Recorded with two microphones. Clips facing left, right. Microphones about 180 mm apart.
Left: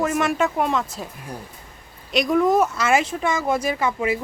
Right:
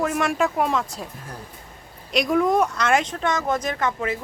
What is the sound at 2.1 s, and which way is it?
Speech, centre (ahead or behind).